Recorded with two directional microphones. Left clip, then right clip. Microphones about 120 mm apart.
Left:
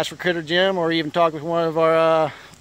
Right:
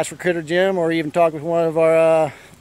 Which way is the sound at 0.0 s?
30° right (ahead or behind).